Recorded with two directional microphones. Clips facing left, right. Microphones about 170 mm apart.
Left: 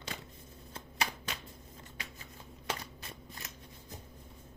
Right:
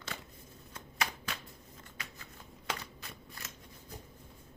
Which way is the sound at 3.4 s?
20° left (ahead or behind).